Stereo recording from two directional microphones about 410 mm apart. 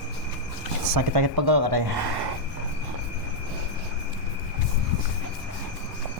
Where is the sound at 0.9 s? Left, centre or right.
Right.